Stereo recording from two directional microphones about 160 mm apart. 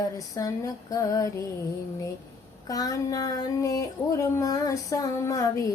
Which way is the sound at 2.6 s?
20° left (ahead or behind).